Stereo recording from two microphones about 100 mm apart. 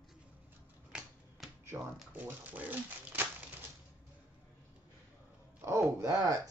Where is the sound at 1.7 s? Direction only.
25° right (ahead or behind).